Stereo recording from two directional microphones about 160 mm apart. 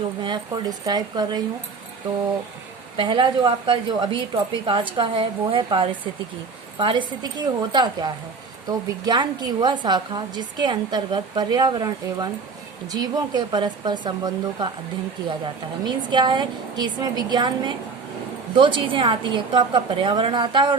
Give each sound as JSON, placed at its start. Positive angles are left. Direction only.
{"t": 0.2, "sound": "a woman's voice", "side_deg": -30}
{"t": 3.0, "sound": "a woman's voice", "side_deg": -30}
{"t": 15.8, "sound": "a woman's voice", "side_deg": -30}